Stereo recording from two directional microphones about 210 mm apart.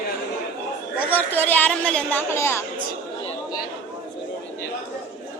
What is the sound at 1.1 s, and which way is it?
A woman's voice, 10° left (ahead or behind).